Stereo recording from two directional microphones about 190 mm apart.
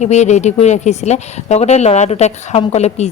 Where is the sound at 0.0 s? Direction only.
35° left (ahead or behind).